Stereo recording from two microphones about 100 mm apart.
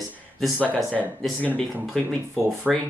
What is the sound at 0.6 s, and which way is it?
Speech, 15° left (ahead or behind).